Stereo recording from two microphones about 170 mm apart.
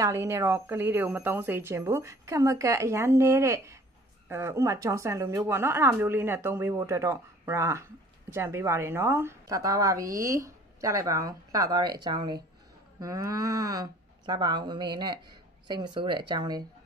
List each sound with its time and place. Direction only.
0.0 s a woman's voice: 20° right (ahead or behind)